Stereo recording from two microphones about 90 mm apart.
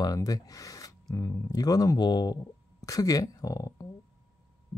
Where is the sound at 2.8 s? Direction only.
40° left (ahead or behind).